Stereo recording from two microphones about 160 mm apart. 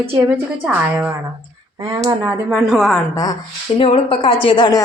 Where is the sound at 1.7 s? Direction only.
25° right (ahead or behind).